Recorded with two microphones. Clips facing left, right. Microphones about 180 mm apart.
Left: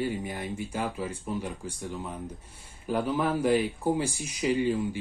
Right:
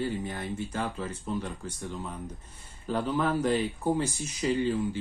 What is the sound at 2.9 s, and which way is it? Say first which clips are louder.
Speech: left 1 dB; 10° left (ahead or behind).